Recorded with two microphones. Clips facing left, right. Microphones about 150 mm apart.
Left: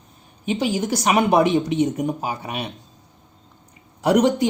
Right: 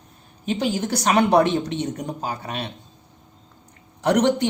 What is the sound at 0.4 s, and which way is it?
A woman's voice, 5° left (ahead or behind).